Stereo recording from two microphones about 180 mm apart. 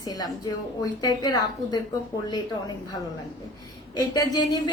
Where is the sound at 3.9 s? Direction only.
25° left (ahead or behind).